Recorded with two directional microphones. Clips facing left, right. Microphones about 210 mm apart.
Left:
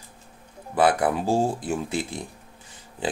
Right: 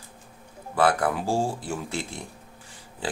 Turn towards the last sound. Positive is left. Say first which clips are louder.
# left 3 dB
turn(degrees=20)  # may be behind; listen again after turning